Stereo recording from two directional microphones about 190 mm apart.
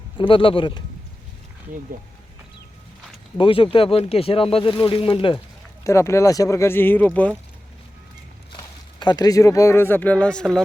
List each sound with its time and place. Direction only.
0.2 s speech: 25° left (ahead or behind)
3.3 s speech: 25° left (ahead or behind)
5.8 s speech: 15° left (ahead or behind)
8.5 s speech: 25° left (ahead or behind); by 10.6 s 5° left (ahead or behind)